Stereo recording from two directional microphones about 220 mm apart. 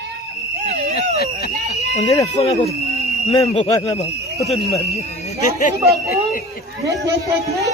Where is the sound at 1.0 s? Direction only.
45° left (ahead or behind).